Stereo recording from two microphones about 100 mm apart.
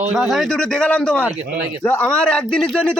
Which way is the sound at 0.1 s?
Centre (ahead or behind).